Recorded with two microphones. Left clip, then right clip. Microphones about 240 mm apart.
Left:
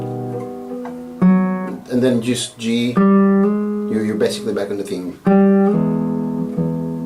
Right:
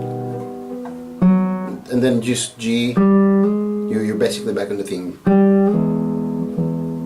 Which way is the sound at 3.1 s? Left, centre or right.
Centre.